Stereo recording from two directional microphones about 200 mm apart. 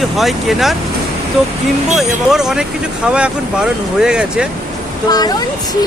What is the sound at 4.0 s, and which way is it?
Speech, 5° right (ahead or behind).